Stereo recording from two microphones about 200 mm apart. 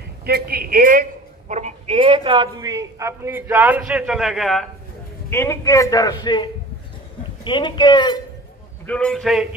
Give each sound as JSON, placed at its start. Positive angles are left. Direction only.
{"t": 0.2, "sound": "a man's voice", "side_deg": -50}
{"t": 1.5, "sound": "a man's voice", "side_deg": -35}
{"t": 5.3, "sound": "a man's voice", "side_deg": 15}
{"t": 8.8, "sound": "a man's voice", "side_deg": 5}